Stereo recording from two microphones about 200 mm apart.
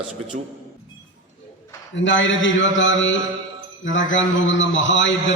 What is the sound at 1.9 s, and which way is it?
A man's voice, 70° left (ahead or behind).